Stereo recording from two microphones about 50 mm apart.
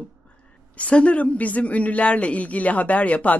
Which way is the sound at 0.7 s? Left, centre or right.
Left.